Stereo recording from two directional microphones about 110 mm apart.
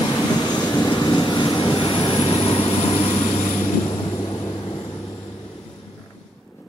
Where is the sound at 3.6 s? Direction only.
30° left (ahead or behind).